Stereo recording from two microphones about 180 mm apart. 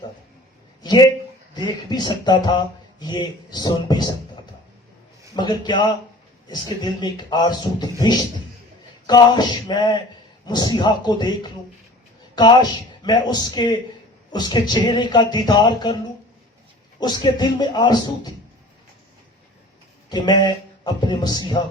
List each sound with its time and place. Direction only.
0.8 s speech: 25° left (ahead or behind)
5.3 s speech: 25° left (ahead or behind)
17.0 s speech: 25° left (ahead or behind)
20.1 s a sound: 25° left (ahead or behind)